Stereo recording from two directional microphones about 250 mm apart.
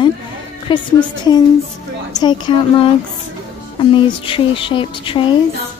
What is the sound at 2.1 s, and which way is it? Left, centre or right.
Speech, centre.